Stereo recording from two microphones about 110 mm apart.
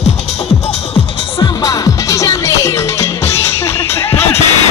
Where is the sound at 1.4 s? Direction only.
35° left (ahead or behind).